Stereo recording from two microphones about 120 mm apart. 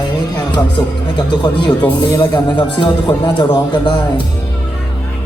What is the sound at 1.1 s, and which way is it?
Speech, 40° left (ahead or behind).